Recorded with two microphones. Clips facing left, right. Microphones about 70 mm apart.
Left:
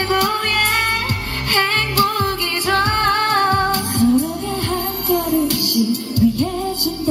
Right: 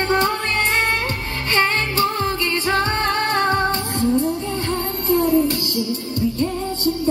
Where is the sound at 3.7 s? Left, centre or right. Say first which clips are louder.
Left 4 dB; left.